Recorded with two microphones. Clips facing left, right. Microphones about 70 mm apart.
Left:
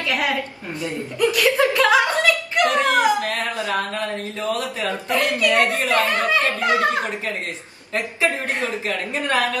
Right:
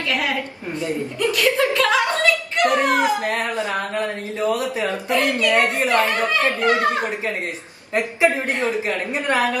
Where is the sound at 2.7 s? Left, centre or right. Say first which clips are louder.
Left 1 dB; right.